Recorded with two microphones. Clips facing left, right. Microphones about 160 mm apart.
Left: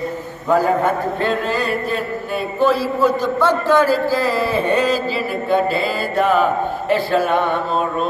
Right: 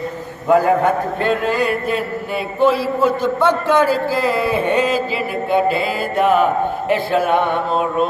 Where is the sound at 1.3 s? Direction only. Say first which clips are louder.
Right 5 dB; 55° right (ahead or behind).